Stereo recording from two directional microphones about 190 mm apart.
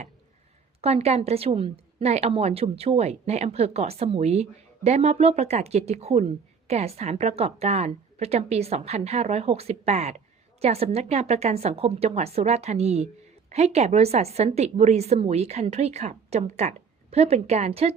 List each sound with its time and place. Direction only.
0.8 s a woman's voice: 35° right (ahead or behind)